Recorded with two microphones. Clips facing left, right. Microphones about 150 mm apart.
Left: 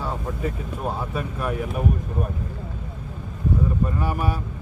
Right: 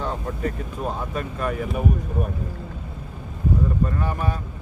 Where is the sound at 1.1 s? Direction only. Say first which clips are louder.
Even; 10° left (ahead or behind).